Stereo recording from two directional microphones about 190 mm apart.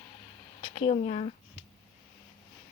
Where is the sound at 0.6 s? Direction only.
35° left (ahead or behind).